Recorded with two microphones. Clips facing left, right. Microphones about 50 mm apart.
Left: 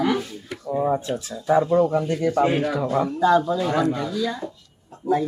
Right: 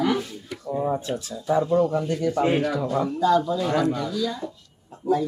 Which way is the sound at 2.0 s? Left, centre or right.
Left.